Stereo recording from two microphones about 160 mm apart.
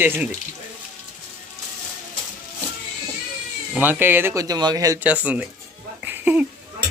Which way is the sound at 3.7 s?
10° right (ahead or behind).